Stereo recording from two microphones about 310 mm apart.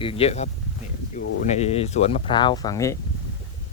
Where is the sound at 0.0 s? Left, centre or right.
Centre.